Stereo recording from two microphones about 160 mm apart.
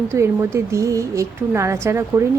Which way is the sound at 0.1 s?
15° right (ahead or behind).